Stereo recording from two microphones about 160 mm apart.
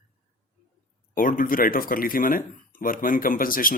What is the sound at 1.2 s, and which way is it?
Speech, 60° left (ahead or behind).